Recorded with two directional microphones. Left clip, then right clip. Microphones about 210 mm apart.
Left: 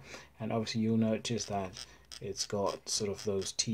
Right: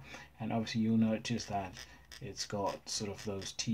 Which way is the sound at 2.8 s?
35° left (ahead or behind).